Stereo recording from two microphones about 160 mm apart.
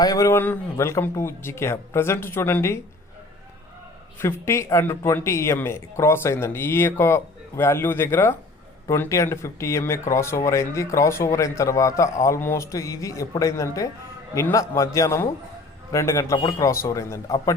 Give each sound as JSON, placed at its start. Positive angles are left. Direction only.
{"t": 0.0, "sound": "speech", "side_deg": 20}
{"t": 4.2, "sound": "speech", "side_deg": 15}